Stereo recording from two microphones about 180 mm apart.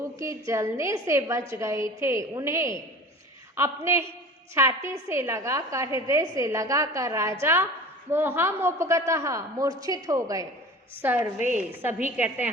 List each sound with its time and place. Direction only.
0.2 s a woman's voice: 15° right (ahead or behind)